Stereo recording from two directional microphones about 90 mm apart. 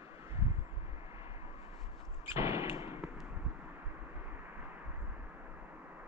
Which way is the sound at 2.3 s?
30° right (ahead or behind).